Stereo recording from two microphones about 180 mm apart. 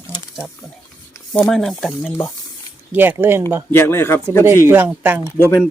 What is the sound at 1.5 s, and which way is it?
Speech, centre (ahead or behind).